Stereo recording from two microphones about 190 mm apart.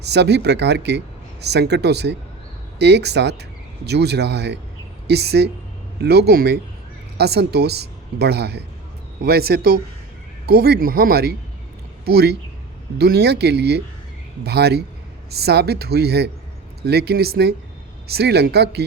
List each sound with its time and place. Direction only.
0.0 s a man's voice: 60° right (ahead or behind)